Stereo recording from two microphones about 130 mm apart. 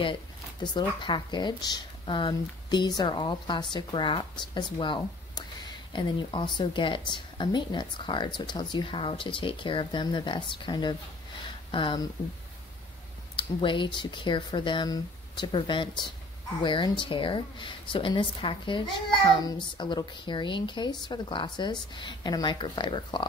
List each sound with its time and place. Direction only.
0.7 s speech: 35° left (ahead or behind)
13.6 s speech: 40° left (ahead or behind)